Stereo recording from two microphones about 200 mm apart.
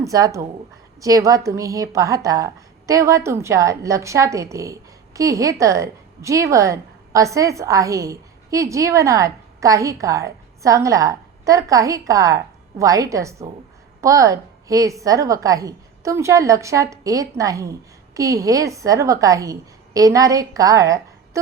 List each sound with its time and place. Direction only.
0.0 s a woman's voice: 15° right (ahead or behind)